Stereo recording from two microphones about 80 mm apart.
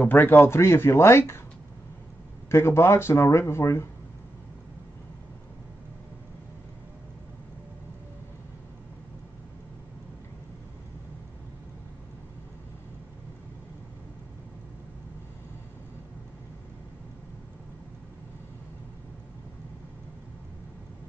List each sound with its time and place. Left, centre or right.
0.0 s speech: left
2.5 s speech: left